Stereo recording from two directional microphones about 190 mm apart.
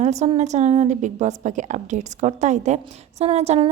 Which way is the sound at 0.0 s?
35° right (ahead or behind).